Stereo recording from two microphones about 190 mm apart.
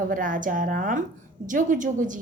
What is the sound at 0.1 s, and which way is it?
A woman's voice, 45° right (ahead or behind).